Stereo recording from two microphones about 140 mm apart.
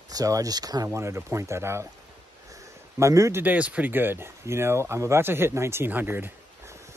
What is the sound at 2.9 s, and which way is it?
Speech, 20° right (ahead or behind).